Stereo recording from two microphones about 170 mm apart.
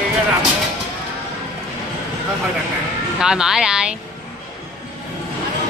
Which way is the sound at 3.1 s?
5° right (ahead or behind).